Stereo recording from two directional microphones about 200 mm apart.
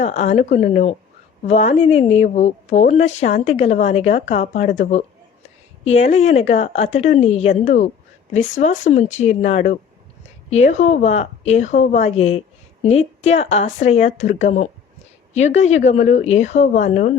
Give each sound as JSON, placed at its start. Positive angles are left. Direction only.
{"t": 0.0, "sound": "a woman's voice", "side_deg": 35}
{"t": 6.1, "sound": "a woman's voice", "side_deg": 30}